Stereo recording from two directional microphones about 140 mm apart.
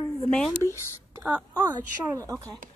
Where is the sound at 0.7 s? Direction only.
20° left (ahead or behind).